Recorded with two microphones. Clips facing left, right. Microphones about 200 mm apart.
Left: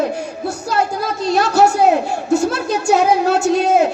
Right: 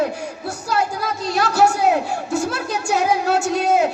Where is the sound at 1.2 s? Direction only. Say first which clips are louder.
Left 4 dB; 25° left (ahead or behind).